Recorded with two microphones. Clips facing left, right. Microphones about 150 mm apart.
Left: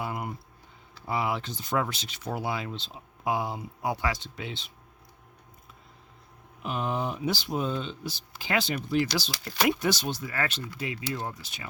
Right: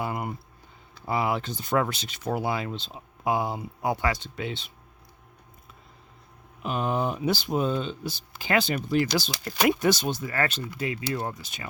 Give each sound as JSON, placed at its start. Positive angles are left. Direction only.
{"t": 0.0, "sound": "a sound", "side_deg": -55}
{"t": 1.0, "sound": "speech", "side_deg": -50}
{"t": 6.6, "sound": "speech", "side_deg": -50}
{"t": 10.8, "sound": "speech", "side_deg": -55}